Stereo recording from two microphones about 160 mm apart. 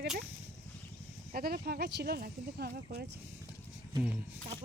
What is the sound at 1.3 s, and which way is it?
Speech, 75° right (ahead or behind).